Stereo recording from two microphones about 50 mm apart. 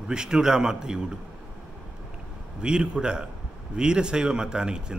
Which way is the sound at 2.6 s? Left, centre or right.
Centre.